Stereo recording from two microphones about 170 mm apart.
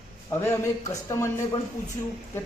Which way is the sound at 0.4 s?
15° left (ahead or behind).